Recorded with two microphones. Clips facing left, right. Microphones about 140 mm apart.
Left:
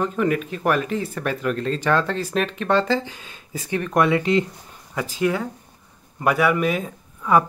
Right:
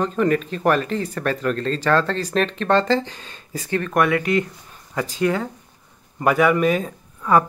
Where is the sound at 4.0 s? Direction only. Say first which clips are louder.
Left 1 dB; 25° left (ahead or behind).